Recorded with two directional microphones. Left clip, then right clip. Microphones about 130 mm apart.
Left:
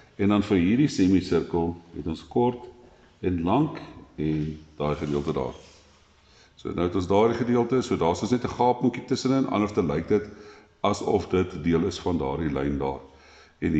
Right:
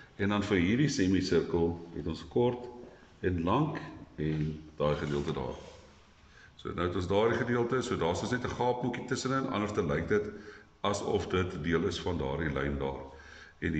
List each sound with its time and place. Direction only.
0.2 s speech: 40° left (ahead or behind)
6.6 s speech: 40° left (ahead or behind)